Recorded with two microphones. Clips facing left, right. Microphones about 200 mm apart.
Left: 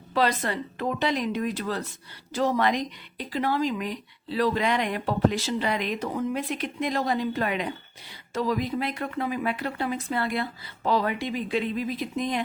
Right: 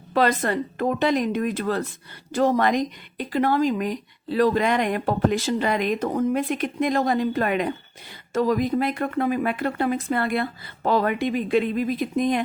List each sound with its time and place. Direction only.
0.1 s speech: 50° right (ahead or behind)